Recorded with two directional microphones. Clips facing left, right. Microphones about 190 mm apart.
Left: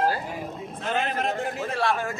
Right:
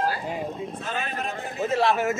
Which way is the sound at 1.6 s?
20° right (ahead or behind).